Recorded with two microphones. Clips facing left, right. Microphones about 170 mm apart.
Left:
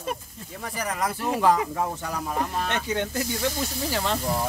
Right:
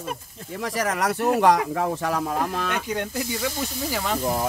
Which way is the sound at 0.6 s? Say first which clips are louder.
Right 4 dB; 90° right.